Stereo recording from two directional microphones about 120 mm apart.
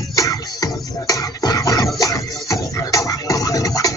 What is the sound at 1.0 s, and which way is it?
Music, 30° left (ahead or behind).